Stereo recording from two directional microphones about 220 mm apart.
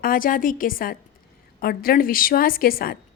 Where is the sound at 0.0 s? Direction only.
40° left (ahead or behind).